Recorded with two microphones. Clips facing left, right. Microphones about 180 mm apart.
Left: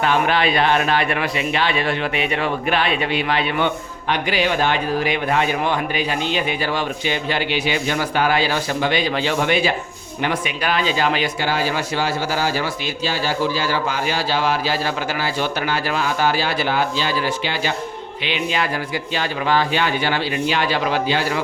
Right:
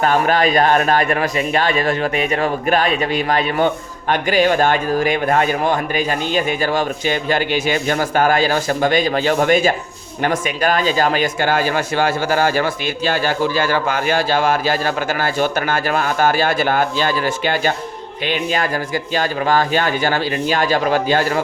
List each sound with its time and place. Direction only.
0.0 s speech: 45° right (ahead or behind)